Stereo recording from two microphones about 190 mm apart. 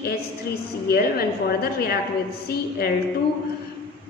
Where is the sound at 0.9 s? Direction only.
60° left (ahead or behind).